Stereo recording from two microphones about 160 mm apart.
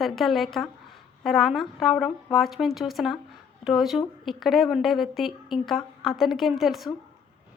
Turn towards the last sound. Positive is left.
turn(degrees=0)  # may be behind; listen again after turning